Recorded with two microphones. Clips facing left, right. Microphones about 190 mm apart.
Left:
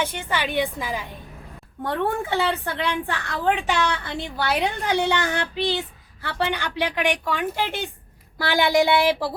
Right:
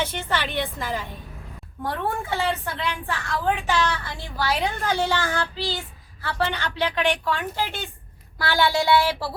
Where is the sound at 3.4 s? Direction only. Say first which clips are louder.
Left 2 dB; 15° left (ahead or behind).